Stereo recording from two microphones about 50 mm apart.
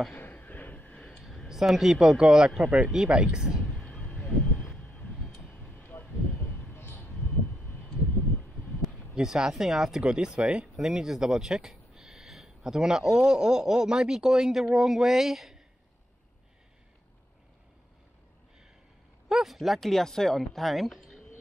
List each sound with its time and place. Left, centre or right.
0.1 s a sound: left
1.5 s speech: centre
3.8 s a sound: left
4.6 s vehicle: left
5.4 s a sound: left
9.1 s speech: centre
10.0 s speech: centre
10.8 s speech: centre
19.2 s speech: centre